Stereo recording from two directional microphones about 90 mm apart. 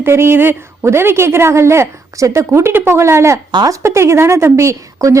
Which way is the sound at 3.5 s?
50° right (ahead or behind).